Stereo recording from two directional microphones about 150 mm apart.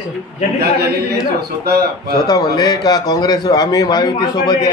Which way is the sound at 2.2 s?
25° left (ahead or behind).